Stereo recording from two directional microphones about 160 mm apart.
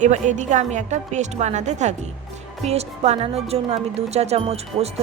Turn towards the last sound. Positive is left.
turn(degrees=-40)  # may be behind; listen again after turning